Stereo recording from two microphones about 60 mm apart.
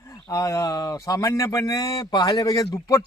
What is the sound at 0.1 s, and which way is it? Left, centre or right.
Speech, left.